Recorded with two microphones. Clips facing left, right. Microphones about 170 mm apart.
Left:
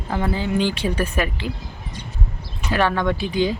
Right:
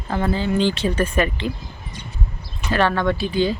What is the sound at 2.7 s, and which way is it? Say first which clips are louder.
Speech: right 1 dB; 15° left (ahead or behind).